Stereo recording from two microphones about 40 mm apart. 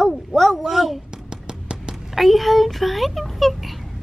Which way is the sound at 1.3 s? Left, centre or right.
Centre.